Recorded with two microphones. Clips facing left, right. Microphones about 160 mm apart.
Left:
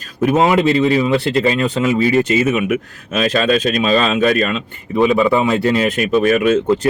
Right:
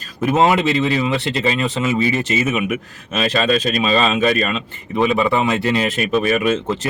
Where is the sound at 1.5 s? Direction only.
Centre (ahead or behind).